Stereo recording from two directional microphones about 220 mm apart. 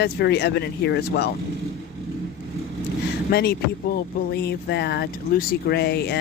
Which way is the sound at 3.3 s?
45° left (ahead or behind).